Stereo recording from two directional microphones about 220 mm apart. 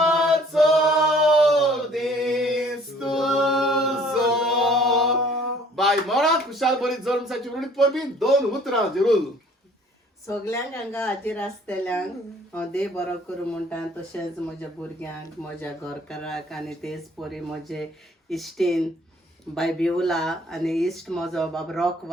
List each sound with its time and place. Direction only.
0.0 s singing: centre (ahead or behind)
3.0 s a capella: centre (ahead or behind)
5.7 s speech: centre (ahead or behind)
10.2 s speech: 15° left (ahead or behind)
14.1 s speech: 5° left (ahead or behind)
15.6 s speech: centre (ahead or behind)